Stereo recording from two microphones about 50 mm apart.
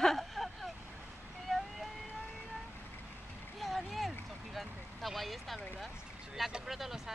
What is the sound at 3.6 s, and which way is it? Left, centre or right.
Boat, centre.